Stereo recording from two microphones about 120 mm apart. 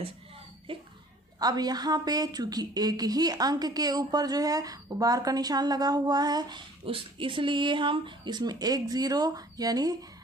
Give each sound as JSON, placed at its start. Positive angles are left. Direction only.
{"t": 0.7, "sound": "a child's voice", "side_deg": -45}
{"t": 1.4, "sound": "speech", "side_deg": -35}
{"t": 6.9, "sound": "speech", "side_deg": -45}